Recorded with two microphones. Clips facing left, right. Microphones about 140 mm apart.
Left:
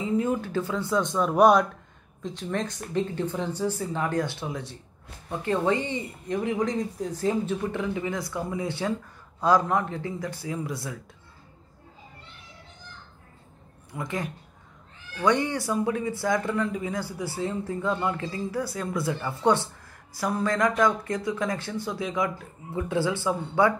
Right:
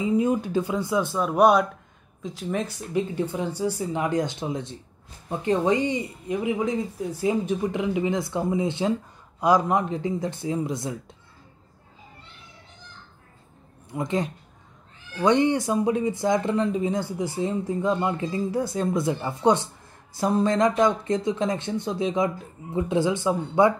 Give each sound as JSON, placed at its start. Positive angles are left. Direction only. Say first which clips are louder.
{"t": 0.0, "sound": "speech", "louder": "right 3 dB", "side_deg": -15}
{"t": 13.9, "sound": "speech", "louder": "right 6 dB", "side_deg": -20}